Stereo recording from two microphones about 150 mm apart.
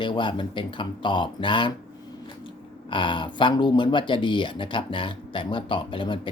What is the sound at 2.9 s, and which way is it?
Speech, 35° left (ahead or behind).